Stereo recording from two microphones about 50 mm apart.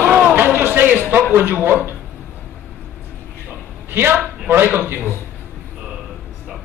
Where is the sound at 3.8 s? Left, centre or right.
Right.